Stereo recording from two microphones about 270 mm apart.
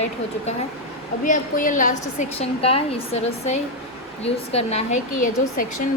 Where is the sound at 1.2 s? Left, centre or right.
Left.